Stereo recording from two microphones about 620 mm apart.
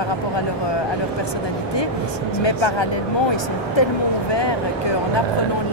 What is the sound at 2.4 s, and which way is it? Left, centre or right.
Speech, left.